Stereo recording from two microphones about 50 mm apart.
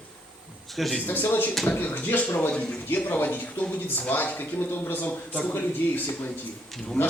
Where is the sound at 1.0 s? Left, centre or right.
Left.